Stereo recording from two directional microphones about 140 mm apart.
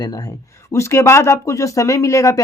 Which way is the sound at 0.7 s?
20° left (ahead or behind).